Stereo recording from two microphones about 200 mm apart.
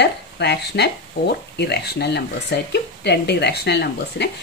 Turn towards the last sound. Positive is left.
turn(degrees=55)  # may be behind; listen again after turning